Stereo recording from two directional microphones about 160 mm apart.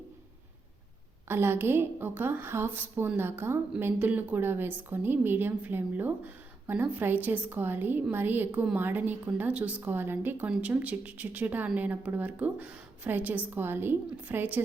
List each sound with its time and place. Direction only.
1.3 s a woman's voice: 15° right (ahead or behind)